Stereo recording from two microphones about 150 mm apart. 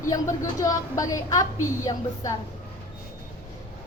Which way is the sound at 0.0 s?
20° left (ahead or behind).